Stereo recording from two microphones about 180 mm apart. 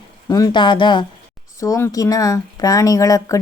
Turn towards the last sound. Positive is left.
turn(degrees=20)  # may be behind; listen again after turning